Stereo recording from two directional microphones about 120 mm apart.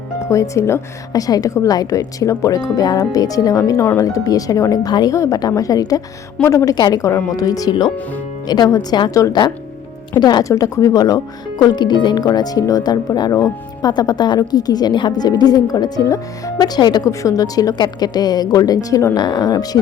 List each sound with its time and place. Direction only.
0.3 s a woman's voice: 25° left (ahead or behind)